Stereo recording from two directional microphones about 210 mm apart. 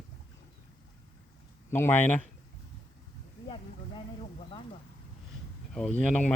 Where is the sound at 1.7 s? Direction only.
10° left (ahead or behind).